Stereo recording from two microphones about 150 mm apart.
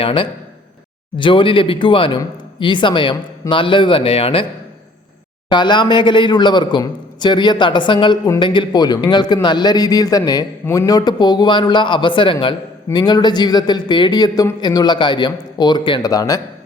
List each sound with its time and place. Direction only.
0.0 s a man's voice: 35° left (ahead or behind)
5.5 s a man's voice: 30° left (ahead or behind)